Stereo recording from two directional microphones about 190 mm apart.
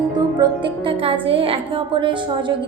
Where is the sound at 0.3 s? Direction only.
25° right (ahead or behind).